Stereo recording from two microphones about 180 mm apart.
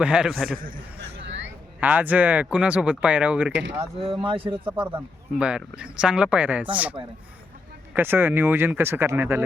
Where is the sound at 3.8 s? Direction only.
30° right (ahead or behind).